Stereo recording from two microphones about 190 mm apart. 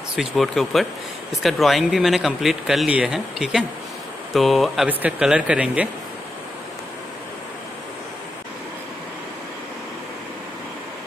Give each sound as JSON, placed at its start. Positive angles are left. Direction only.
{"t": 0.1, "sound": "speech", "side_deg": 0}